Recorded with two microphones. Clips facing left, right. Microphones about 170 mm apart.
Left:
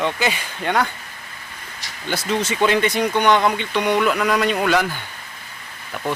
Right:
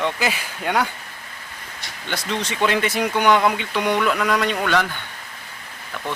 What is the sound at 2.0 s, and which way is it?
Speech, 5° left (ahead or behind).